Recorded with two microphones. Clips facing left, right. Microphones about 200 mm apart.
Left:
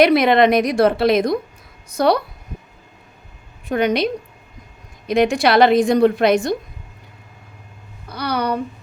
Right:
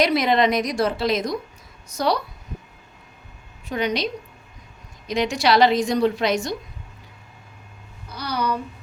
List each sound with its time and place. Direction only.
0.0 s a woman's voice: 60° left (ahead or behind)
3.7 s a woman's voice: 55° left (ahead or behind)
8.1 s a sound: 60° left (ahead or behind)